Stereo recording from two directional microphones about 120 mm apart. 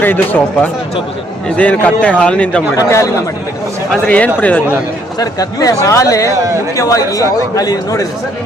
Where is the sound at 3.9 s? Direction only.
10° left (ahead or behind).